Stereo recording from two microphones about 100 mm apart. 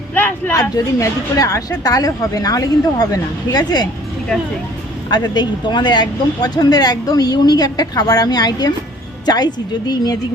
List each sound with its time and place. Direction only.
0.1 s a sound: 20° left (ahead or behind)
0.9 s a woman's voice: 35° left (ahead or behind)
5.1 s a woman's voice: 45° left (ahead or behind)